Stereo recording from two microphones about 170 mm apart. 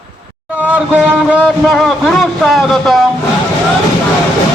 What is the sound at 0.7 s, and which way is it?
A man's voice, 5° right (ahead or behind).